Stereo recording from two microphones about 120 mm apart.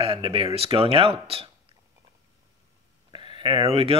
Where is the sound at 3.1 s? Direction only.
40° right (ahead or behind).